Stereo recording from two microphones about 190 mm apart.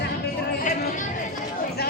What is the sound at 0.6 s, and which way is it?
Chatter, 45° left (ahead or behind).